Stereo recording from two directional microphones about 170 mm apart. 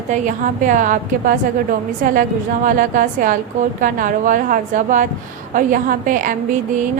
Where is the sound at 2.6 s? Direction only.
50° right (ahead or behind).